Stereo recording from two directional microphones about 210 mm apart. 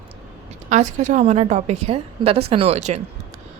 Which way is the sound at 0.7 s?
35° right (ahead or behind).